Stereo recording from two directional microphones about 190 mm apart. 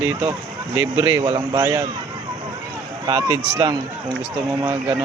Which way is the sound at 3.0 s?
25° right (ahead or behind).